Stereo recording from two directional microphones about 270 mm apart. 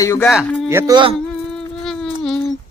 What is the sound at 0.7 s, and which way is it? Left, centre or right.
Speech, centre.